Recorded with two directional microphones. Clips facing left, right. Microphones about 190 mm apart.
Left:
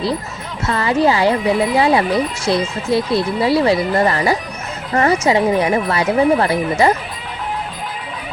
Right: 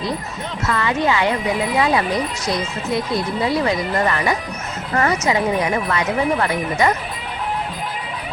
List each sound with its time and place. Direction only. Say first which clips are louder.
0.6 s speech: left 5 dB; 30° left (ahead or behind)